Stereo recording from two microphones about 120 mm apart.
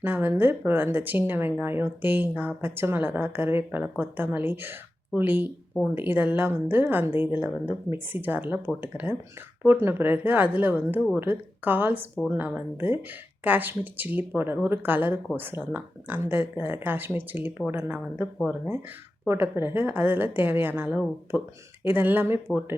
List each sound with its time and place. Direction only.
0.0 s speech: 15° right (ahead or behind)
19.3 s speech: 20° right (ahead or behind)